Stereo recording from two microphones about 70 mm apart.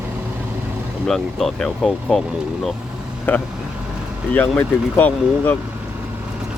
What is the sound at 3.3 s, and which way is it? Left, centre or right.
Speech, left.